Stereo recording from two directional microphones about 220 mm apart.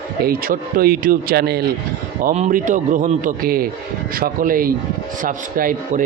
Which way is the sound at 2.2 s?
35° right (ahead or behind).